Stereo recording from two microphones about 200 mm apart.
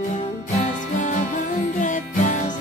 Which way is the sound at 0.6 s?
40° left (ahead or behind).